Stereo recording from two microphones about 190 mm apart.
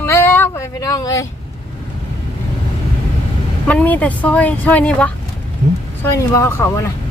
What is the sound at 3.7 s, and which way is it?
Speech, 10° left (ahead or behind).